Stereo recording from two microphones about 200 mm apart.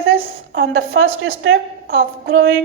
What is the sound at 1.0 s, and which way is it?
Speech, 70° right (ahead or behind).